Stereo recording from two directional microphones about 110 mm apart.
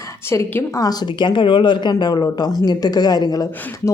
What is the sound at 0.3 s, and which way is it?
A woman's voice, 25° left (ahead or behind).